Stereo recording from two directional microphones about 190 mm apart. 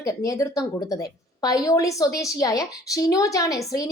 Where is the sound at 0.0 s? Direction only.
15° left (ahead or behind).